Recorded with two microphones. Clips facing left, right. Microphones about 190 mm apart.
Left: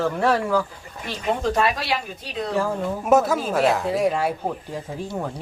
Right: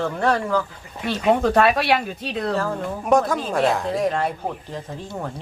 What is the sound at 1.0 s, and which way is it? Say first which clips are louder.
Speech: right 5 dB; 65° right (ahead or behind).